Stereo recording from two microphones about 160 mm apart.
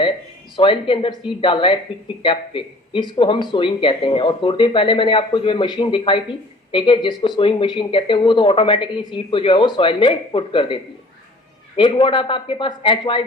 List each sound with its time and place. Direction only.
0.5 s speech: 30° left (ahead or behind)
11.8 s speech: 30° left (ahead or behind)